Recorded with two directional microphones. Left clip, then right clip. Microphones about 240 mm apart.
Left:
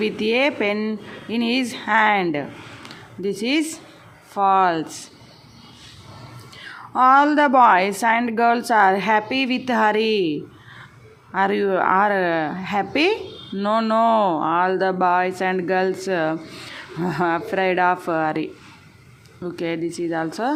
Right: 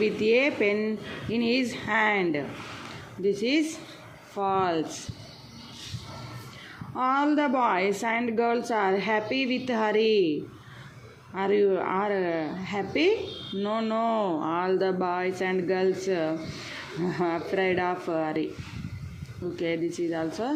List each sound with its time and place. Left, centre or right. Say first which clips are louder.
0.0 s a woman's voice: left 3 dB; centre
6.9 s a woman's voice: left 10 dB; left
11.3 s a woman's voice: left 5 dB; left
19.5 s speech: left 3 dB; centre